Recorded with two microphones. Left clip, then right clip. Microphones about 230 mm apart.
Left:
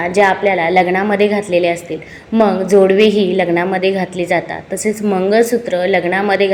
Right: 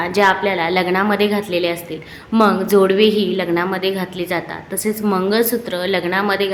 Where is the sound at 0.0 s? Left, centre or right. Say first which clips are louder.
Left 3 dB; centre.